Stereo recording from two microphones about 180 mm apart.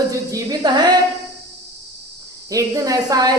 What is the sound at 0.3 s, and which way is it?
Music, 20° right (ahead or behind).